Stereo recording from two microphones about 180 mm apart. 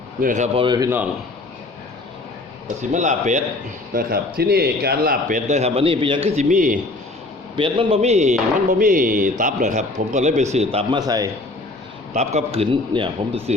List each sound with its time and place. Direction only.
0.2 s a man's voice: 45° right (ahead or behind)
0.6 s a man's voice: 25° right (ahead or behind)
2.9 s a man's voice: 40° right (ahead or behind)
3.9 s speech: 60° right (ahead or behind)
7.5 s a man's voice: 30° right (ahead or behind)
8.8 s a man's voice: 50° right (ahead or behind); by 11.0 s 35° right (ahead or behind)
11.0 s a man's voice: 20° right (ahead or behind)
12.1 s a man's voice: 40° right (ahead or behind)